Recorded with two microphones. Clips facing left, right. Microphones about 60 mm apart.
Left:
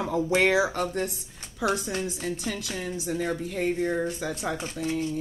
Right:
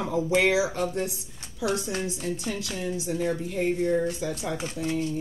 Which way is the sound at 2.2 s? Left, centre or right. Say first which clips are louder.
Right 1 dB; left.